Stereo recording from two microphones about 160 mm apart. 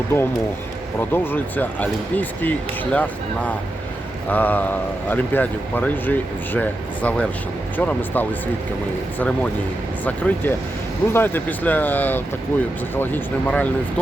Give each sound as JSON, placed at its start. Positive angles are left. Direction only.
{"t": 0.1, "sound": "speech", "side_deg": 15}